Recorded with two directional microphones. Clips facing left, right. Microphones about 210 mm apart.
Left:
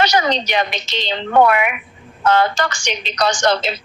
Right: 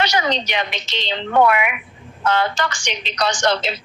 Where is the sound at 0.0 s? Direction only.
40° left (ahead or behind).